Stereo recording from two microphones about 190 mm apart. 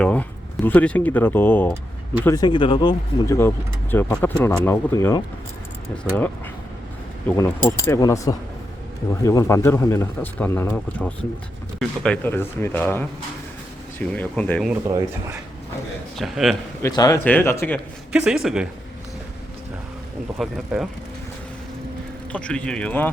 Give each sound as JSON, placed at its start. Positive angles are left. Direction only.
{"t": 0.0, "sound": "speech", "side_deg": 5}
{"t": 3.9, "sound": "a man's voice", "side_deg": 10}
{"t": 14.8, "sound": "speech", "side_deg": -15}
{"t": 16.1, "sound": "a man's voice", "side_deg": 0}
{"t": 16.8, "sound": "a man's voice", "side_deg": 20}
{"t": 18.1, "sound": "a man's voice", "side_deg": -5}
{"t": 20.7, "sound": "a man's voice", "side_deg": -5}
{"t": 22.3, "sound": "a man's voice", "side_deg": 5}